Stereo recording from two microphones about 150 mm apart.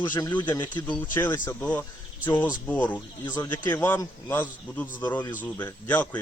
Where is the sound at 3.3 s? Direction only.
25° left (ahead or behind).